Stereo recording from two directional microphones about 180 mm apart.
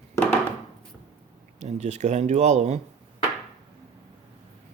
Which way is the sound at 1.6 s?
40° right (ahead or behind).